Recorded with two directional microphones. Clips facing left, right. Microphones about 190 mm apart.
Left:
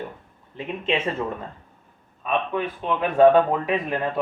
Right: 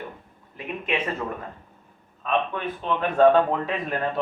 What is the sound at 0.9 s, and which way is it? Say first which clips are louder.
Speech: left 3 dB; 25° left (ahead or behind).